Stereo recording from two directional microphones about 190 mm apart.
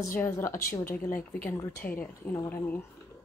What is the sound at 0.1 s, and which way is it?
Speech, 15° left (ahead or behind).